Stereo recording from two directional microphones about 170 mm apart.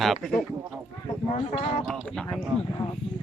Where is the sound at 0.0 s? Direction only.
Centre (ahead or behind).